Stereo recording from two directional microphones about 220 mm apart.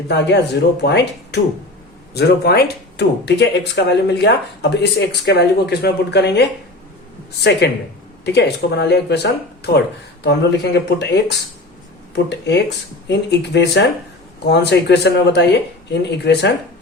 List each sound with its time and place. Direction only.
0.1 s speech: 50° left (ahead or behind)
7.6 s speech: 50° left (ahead or behind)